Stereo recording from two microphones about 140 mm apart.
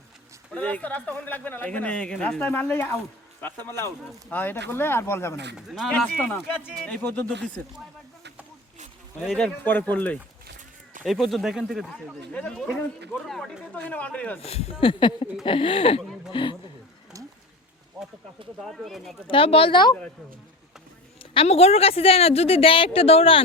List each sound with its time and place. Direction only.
0.5 s speech: 10° left (ahead or behind)
5.5 s speech: 5° right (ahead or behind)
5.9 s speech: 10° left (ahead or behind)
9.2 s speech: centre (ahead or behind)
9.6 s speech: 10° left (ahead or behind)
11.0 s speech: centre (ahead or behind)
14.4 s speech: 45° left (ahead or behind)
18.6 s speech: centre (ahead or behind)
19.3 s speech: 40° left (ahead or behind)
21.3 s a woman's voice: 45° left (ahead or behind)